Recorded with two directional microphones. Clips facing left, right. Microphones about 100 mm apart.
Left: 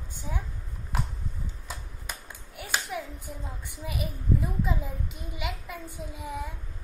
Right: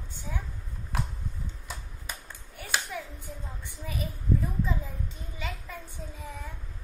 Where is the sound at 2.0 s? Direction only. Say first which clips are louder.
Left 1 dB; 10° left (ahead or behind).